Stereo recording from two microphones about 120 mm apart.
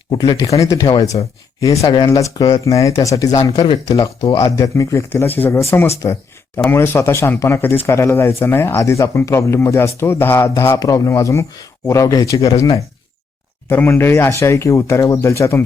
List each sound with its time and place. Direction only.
0.1 s speech: 40° left (ahead or behind)
12.5 s speech: 55° left (ahead or behind)
13.7 s speech: 15° left (ahead or behind)